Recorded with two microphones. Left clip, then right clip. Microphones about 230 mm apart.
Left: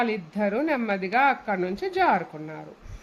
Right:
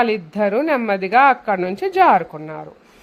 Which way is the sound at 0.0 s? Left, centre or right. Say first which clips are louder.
Right 8 dB; right.